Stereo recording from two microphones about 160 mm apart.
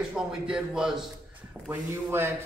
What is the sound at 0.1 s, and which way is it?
Speech, 5° right (ahead or behind).